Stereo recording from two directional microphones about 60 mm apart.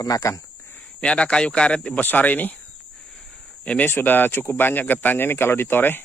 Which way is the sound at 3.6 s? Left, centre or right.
Left.